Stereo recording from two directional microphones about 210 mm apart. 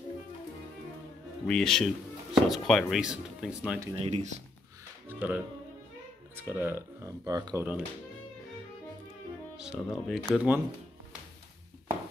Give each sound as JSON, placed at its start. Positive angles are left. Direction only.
{"t": 1.5, "sound": "speech", "side_deg": 0}
{"t": 3.9, "sound": "speech", "side_deg": -30}
{"t": 5.0, "sound": "speech", "side_deg": -10}
{"t": 9.6, "sound": "speech", "side_deg": 0}